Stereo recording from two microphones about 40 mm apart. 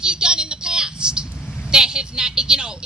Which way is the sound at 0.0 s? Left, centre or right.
Centre.